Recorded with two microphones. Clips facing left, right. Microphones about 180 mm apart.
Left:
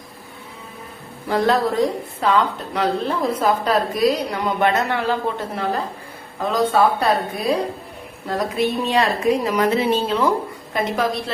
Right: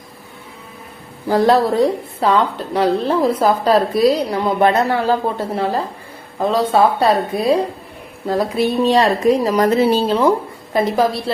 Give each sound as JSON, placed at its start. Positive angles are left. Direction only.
{"t": 1.3, "sound": "a woman's voice", "side_deg": -35}